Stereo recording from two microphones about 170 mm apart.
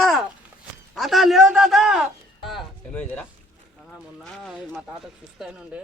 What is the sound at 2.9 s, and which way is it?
A man's voice, 10° left (ahead or behind).